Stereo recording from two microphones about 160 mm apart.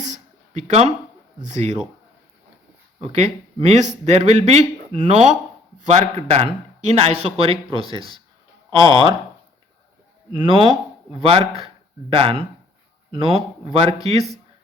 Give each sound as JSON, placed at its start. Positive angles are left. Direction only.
{"t": 0.0, "sound": "a sound", "side_deg": -45}
{"t": 1.4, "sound": "speech", "side_deg": -45}
{"t": 3.0, "sound": "a man's voice", "side_deg": -40}
{"t": 10.3, "sound": "a man's voice", "side_deg": -30}